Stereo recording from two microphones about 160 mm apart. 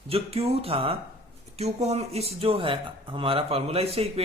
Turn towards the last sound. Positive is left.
turn(degrees=-40)  # may be behind; listen again after turning